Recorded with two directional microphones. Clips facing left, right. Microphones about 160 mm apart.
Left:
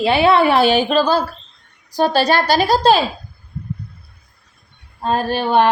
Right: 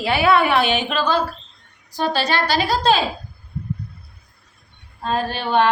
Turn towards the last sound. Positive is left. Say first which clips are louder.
# left 3 dB
turn(degrees=40)  # may be behind; listen again after turning